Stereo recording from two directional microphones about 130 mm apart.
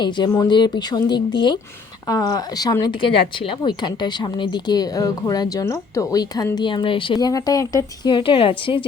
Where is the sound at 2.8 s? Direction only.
40° left (ahead or behind).